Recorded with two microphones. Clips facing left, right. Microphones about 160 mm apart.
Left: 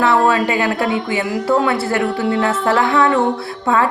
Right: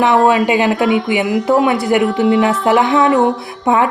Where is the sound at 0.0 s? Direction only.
20° right (ahead or behind).